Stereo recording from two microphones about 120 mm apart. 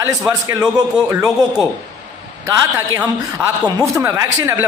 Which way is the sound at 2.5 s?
20° right (ahead or behind).